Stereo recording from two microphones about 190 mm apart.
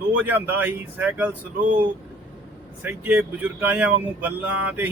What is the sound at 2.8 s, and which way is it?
Speech, 10° right (ahead or behind).